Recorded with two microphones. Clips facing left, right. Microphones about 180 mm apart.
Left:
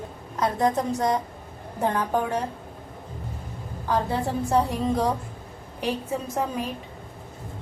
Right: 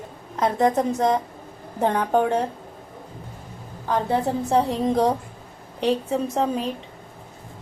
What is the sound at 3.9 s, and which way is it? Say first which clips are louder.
A woman's voice: right 3 dB; 20° right (ahead or behind).